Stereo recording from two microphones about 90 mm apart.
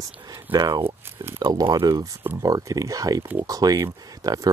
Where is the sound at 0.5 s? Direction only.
50° right (ahead or behind).